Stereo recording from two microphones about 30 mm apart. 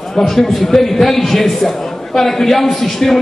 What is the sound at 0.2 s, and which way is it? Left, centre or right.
A man's voice, centre.